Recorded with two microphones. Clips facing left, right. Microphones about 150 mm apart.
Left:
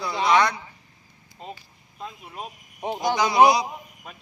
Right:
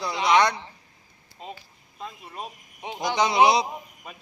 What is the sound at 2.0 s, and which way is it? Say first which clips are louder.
Speech: even; centre (ahead or behind).